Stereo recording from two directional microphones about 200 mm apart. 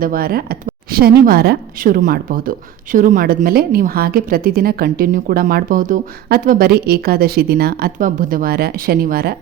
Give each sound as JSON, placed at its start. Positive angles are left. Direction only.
{"t": 0.0, "sound": "speech", "side_deg": -45}